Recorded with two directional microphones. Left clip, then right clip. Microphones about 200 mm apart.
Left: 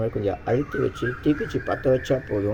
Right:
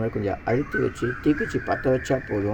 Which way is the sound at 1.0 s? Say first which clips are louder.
Even; 40° left (ahead or behind).